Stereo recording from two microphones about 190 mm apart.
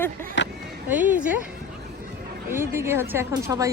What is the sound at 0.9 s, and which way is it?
Speech, 10° right (ahead or behind).